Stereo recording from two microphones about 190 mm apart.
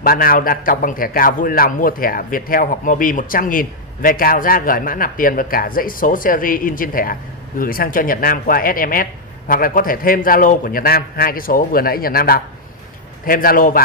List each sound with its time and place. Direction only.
0.0 s a man's voice: 50° left (ahead or behind)